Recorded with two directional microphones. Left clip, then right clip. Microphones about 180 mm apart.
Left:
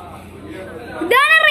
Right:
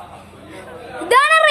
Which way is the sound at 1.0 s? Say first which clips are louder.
Even; 15° right (ahead or behind).